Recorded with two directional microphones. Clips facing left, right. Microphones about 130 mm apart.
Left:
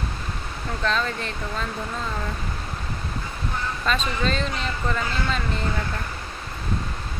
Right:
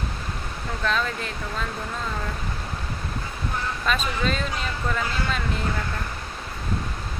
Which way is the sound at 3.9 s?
5° right (ahead or behind).